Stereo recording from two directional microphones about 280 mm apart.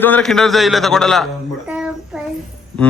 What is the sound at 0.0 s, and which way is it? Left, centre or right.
Speech, centre.